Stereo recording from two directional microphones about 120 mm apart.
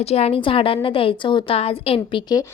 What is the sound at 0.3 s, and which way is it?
A woman's voice, 45° left (ahead or behind).